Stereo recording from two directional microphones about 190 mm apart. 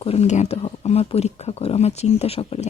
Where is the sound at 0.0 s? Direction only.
35° left (ahead or behind).